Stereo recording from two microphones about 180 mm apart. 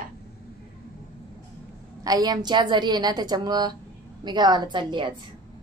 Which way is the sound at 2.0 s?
20° right (ahead or behind).